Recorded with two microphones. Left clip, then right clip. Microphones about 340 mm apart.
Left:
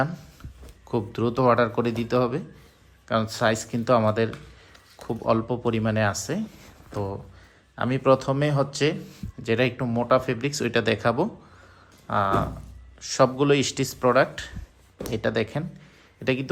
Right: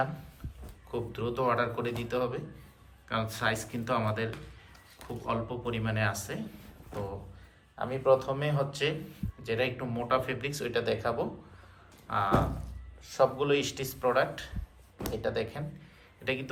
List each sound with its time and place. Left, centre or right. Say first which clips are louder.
0.9 s a man's voice: left 8 dB; centre
7.8 s a man's voice: left 5 dB; left